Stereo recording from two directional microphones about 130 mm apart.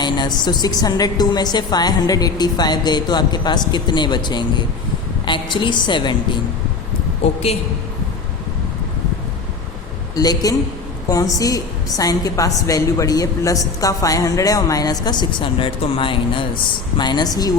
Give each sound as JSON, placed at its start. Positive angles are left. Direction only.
{"t": 0.0, "sound": "a woman's voice", "side_deg": 35}
{"t": 10.2, "sound": "a woman's voice", "side_deg": 30}